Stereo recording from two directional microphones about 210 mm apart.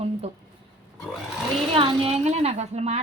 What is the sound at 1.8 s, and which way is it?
A woman's voice, 30° right (ahead or behind).